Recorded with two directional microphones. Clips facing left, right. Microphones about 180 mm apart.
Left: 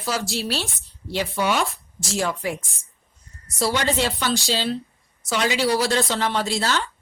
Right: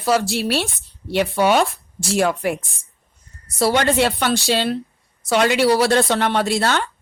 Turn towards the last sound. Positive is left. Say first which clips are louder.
# right 4 dB
turn(degrees=-60)  # may be behind; listen again after turning